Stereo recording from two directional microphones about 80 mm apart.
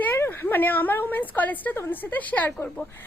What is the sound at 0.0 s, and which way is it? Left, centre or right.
Speech, left.